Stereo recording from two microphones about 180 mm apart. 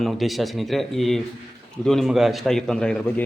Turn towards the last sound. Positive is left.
turn(degrees=5)  # may be behind; listen again after turning